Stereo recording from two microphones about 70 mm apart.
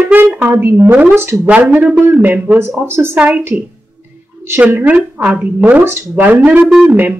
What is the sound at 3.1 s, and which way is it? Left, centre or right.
Speech, right.